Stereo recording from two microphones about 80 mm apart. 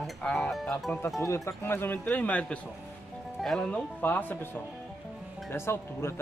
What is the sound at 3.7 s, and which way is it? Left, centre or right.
Speech, left.